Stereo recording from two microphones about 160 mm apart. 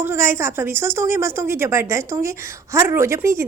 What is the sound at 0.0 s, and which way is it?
Speech, 15° right (ahead or behind).